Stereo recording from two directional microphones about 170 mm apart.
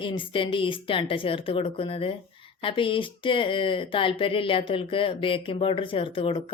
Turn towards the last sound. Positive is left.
turn(degrees=30)  # may be behind; listen again after turning